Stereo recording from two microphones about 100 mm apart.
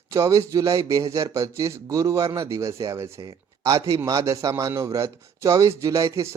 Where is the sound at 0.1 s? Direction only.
35° right (ahead or behind).